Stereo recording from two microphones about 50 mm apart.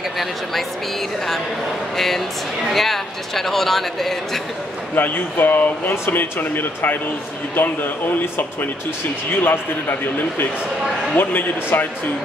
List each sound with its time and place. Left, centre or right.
2.0 s speech: centre
4.9 s speech: left
9.3 s speech: left
11.1 s speech: left